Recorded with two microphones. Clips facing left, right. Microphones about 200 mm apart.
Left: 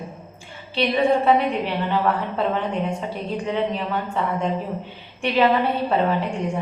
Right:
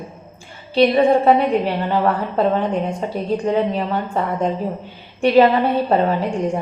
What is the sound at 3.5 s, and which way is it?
A woman's voice, 40° right (ahead or behind).